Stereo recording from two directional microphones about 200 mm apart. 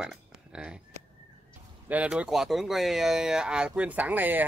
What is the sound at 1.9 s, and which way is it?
Speech, 5° right (ahead or behind).